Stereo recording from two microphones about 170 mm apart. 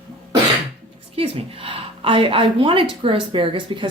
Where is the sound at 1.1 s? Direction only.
35° right (ahead or behind).